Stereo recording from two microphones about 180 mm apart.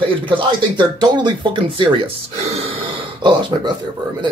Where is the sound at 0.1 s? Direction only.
30° right (ahead or behind).